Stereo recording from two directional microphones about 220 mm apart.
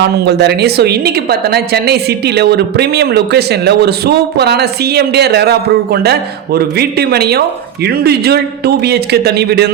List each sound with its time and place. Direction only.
0.0 s a woman's voice: 50° right (ahead or behind)